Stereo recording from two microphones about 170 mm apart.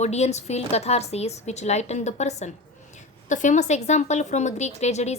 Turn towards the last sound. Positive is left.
turn(degrees=40)  # may be behind; listen again after turning